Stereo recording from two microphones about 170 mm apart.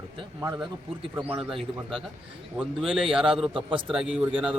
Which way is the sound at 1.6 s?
Centre (ahead or behind).